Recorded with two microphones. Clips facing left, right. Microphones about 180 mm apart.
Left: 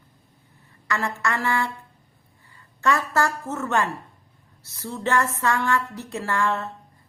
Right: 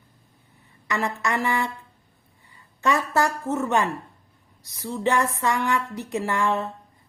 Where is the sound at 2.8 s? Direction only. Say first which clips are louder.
Even; 20° right (ahead or behind).